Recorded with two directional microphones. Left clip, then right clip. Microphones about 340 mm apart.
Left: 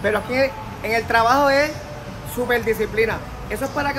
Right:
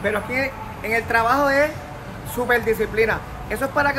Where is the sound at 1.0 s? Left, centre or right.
Centre.